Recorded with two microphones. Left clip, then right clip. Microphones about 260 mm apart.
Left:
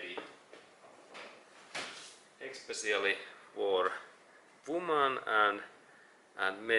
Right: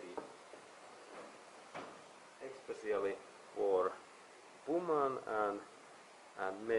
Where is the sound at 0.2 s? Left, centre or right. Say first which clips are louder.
Left 2 dB; centre.